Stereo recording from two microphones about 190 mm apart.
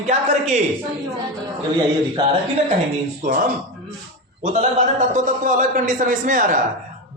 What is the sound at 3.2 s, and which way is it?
A man's voice, 45° right (ahead or behind).